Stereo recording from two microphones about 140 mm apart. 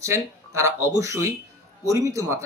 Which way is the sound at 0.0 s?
20° right (ahead or behind).